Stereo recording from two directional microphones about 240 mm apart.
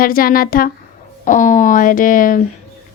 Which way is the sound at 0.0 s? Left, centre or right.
Left.